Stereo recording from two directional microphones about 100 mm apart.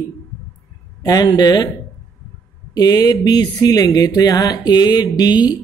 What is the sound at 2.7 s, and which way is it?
Speech, 40° left (ahead or behind).